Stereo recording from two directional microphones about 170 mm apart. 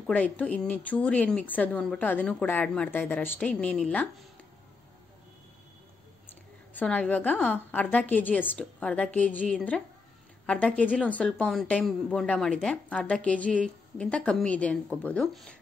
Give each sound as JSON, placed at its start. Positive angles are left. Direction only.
{"t": 0.0, "sound": "a woman's voice", "side_deg": 10}
{"t": 6.8, "sound": "a woman's voice", "side_deg": 10}